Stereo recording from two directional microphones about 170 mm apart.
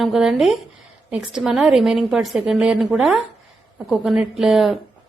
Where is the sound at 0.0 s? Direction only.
Centre (ahead or behind).